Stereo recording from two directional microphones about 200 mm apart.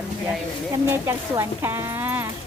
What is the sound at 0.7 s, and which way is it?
Speech, 15° right (ahead or behind).